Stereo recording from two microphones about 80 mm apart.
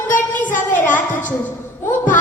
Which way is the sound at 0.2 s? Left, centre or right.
Left.